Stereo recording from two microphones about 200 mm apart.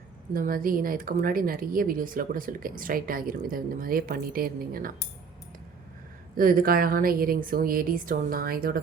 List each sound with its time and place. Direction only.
0.3 s speech: 45° right (ahead or behind)
6.3 s speech: 45° right (ahead or behind)